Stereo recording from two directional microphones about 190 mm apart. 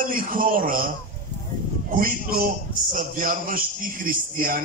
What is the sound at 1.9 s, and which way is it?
A man's voice, 45° right (ahead or behind).